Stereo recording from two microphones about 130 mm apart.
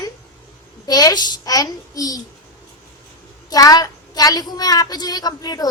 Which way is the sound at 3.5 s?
30° left (ahead or behind).